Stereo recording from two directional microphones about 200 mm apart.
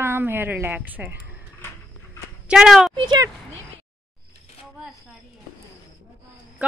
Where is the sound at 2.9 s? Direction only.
20° right (ahead or behind).